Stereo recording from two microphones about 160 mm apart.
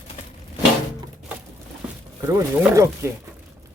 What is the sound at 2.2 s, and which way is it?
Speech, 15° right (ahead or behind).